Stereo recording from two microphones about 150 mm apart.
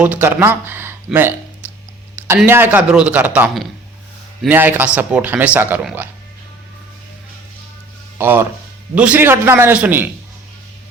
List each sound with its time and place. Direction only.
0.0 s a man's voice: 10° right (ahead or behind)
8.2 s a man's voice: 15° right (ahead or behind)